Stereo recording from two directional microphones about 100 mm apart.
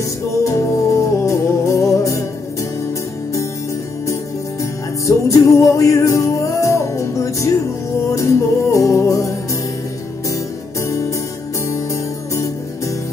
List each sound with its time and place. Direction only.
0.4 s music: 30° left (ahead or behind)
4.6 s music: 30° left (ahead or behind)